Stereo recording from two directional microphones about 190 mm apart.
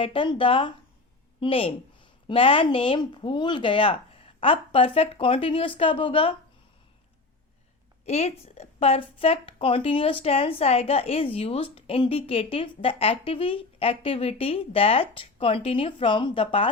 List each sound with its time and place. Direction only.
0.0 s a woman's voice: 25° left (ahead or behind)
8.0 s a woman's voice: 35° left (ahead or behind)